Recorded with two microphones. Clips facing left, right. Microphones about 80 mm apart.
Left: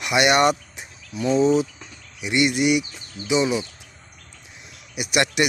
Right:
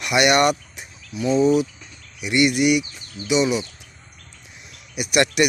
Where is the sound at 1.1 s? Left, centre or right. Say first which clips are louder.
Right 1 dB; left.